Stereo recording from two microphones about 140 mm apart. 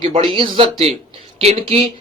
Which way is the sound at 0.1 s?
40° right (ahead or behind).